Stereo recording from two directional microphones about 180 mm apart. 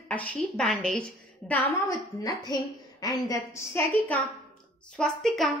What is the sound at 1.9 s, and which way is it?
A woman's voice, 20° left (ahead or behind).